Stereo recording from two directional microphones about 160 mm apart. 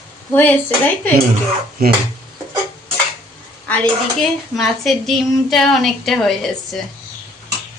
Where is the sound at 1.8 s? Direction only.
75° right (ahead or behind).